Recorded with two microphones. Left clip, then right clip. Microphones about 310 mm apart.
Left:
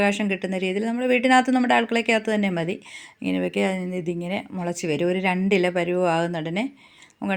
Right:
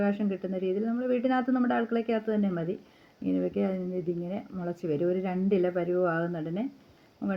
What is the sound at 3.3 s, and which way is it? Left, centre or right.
Speech, left.